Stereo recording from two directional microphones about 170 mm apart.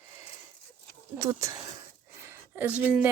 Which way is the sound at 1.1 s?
20° right (ahead or behind).